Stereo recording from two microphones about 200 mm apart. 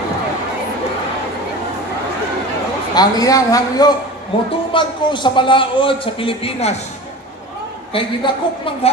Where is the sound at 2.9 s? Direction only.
20° left (ahead or behind).